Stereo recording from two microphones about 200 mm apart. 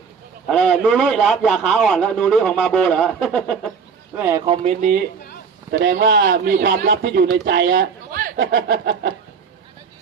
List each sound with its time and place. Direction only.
0.4 s a man's voice: centre (ahead or behind)
4.2 s speech: 15° right (ahead or behind)
6.1 s speech: 60° right (ahead or behind)
6.5 s speech: 45° right (ahead or behind); by 7.9 s 65° right (ahead or behind)
8.1 s speech: 50° right (ahead or behind); by 9.1 s 65° right (ahead or behind)